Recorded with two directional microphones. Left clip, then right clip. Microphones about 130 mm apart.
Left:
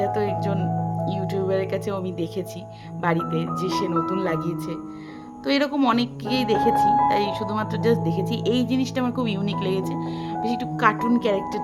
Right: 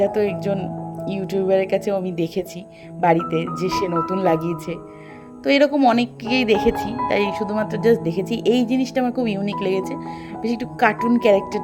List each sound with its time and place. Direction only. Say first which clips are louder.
0.0 s speech: right 4 dB; 25° right (ahead or behind)